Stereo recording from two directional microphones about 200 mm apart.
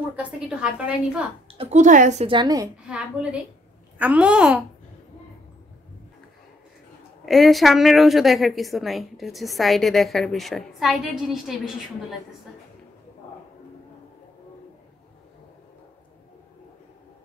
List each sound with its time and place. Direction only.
0.1 s a woman's voice: 5° right (ahead or behind)
1.6 s a woman's voice: 35° right (ahead or behind); by 2.7 s 20° right (ahead or behind)
2.9 s a woman's voice: 5° right (ahead or behind)
7.2 s a woman's voice: centre (ahead or behind)